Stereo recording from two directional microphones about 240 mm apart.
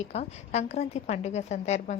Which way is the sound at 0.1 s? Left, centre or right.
Left.